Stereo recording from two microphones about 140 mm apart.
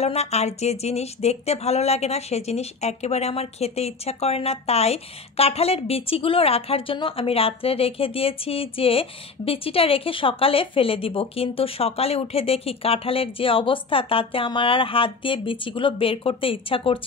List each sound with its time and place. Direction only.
0.0 s speech: 50° left (ahead or behind)